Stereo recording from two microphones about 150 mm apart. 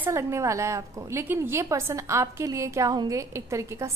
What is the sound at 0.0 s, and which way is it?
A woman's voice, 20° right (ahead or behind).